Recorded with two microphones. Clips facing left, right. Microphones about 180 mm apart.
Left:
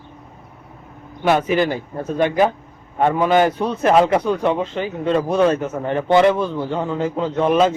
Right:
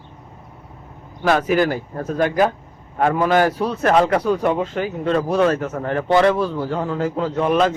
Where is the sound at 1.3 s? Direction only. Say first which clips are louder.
Left 1 dB; centre (ahead or behind).